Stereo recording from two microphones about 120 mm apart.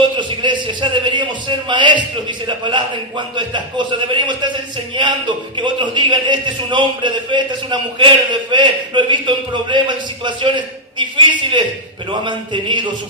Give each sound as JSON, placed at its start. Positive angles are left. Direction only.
{"t": 0.0, "sound": "a sound", "side_deg": -40}
{"t": 3.3, "sound": "a man's voice", "side_deg": -40}
{"t": 5.5, "sound": "a man's voice", "side_deg": -40}